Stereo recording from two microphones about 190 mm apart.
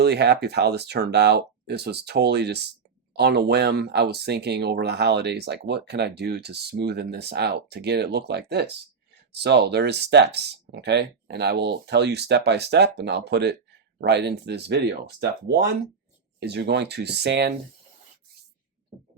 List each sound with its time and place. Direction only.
0.0 s speech: 60° right (ahead or behind)